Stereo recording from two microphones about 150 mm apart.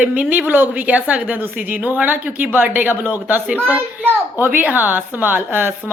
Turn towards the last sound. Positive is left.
turn(degrees=-15)  # may be behind; listen again after turning